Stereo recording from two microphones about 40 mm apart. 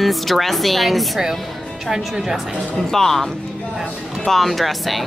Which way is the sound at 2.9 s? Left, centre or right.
Centre.